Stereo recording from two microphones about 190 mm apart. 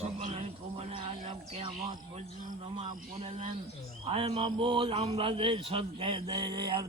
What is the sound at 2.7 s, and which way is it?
A man's voice, 30° right (ahead or behind).